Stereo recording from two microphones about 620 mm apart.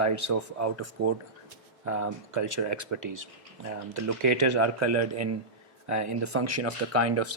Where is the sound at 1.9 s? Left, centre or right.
Right.